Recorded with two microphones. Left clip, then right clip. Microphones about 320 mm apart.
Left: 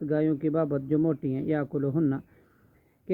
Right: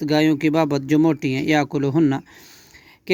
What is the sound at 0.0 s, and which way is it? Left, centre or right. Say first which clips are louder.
Speech: right 8 dB; right.